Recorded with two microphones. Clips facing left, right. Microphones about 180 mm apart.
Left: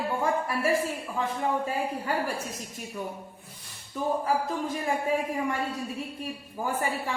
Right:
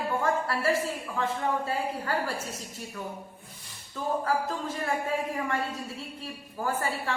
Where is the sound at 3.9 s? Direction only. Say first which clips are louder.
Left 1 dB; 15° left (ahead or behind).